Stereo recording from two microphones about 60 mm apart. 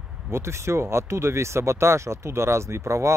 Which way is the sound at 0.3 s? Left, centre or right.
Right.